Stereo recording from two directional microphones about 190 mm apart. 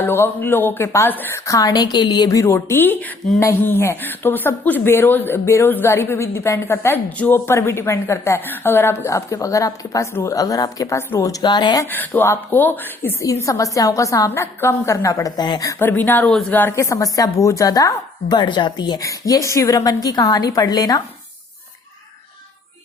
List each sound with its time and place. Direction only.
0.0 s a woman's voice: 10° left (ahead or behind)
15.8 s a woman's voice: 10° left (ahead or behind)